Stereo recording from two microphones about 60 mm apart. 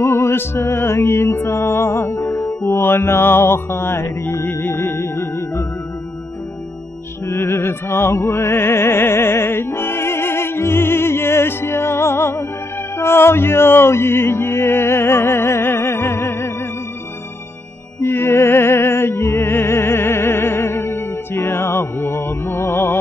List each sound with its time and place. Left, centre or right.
0.0 s music: left
2.6 s music: left
7.2 s music: left
18.0 s music: left